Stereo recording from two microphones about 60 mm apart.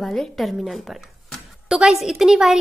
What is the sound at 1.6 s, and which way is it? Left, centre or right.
Speech, centre.